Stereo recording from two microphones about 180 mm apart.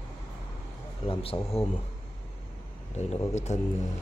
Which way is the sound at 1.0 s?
30° left (ahead or behind).